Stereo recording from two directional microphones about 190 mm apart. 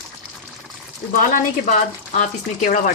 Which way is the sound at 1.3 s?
45° left (ahead or behind).